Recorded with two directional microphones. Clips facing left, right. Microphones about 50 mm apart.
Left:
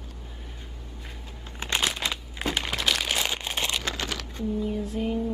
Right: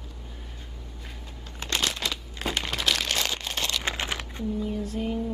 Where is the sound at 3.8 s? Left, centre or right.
Right.